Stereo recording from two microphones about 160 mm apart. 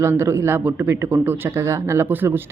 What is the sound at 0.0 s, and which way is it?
Speech, 15° right (ahead or behind).